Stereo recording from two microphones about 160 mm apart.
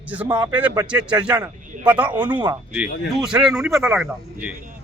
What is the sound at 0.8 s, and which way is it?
A man's voice, 5° right (ahead or behind).